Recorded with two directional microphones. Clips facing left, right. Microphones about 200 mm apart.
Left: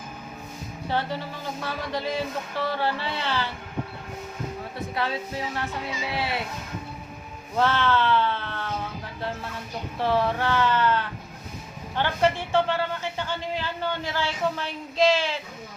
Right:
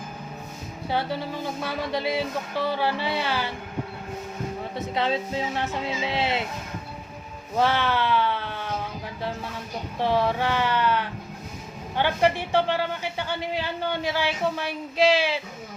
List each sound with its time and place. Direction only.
1.6 s a woman's voice: 15° right (ahead or behind)
4.9 s speech: 20° right (ahead or behind)
7.5 s speech: 15° right (ahead or behind)
10.0 s a woman's voice: 15° right (ahead or behind)